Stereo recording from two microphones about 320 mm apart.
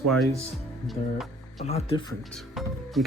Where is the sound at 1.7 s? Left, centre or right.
Centre.